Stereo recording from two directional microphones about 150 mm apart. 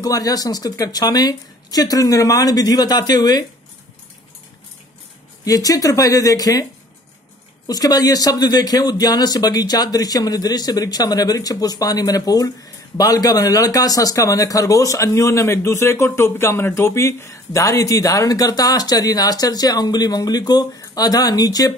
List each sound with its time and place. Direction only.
0.0 s speech: 25° left (ahead or behind)
5.4 s speech: 25° left (ahead or behind)
7.6 s speech: 25° left (ahead or behind)